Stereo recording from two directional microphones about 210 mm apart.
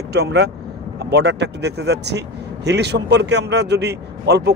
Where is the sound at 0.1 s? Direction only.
50° right (ahead or behind).